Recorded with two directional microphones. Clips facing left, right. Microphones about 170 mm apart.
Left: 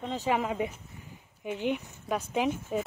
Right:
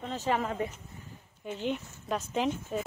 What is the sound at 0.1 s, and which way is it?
Speech, 10° left (ahead or behind).